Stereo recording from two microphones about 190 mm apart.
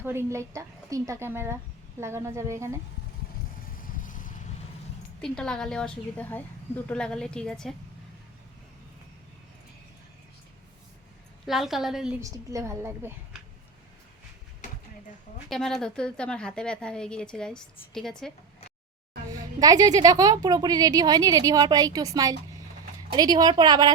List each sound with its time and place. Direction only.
0.0 s a woman's voice: 10° right (ahead or behind)
3.8 s vehicle: 45° left (ahead or behind)
5.2 s a woman's voice: 5° left (ahead or behind)
11.4 s a woman's voice: centre (ahead or behind)
12.2 s a woman's voice: 15° right (ahead or behind)
15.4 s a woman's voice: centre (ahead or behind)
19.3 s a woman's voice: 20° right (ahead or behind)